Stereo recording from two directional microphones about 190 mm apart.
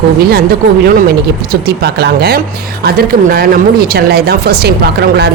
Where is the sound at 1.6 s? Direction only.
60° right (ahead or behind).